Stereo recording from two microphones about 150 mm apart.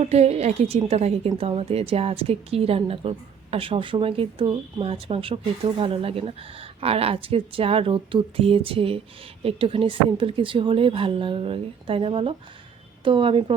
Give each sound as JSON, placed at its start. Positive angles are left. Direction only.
{"t": 0.0, "sound": "a woman's voice", "side_deg": -45}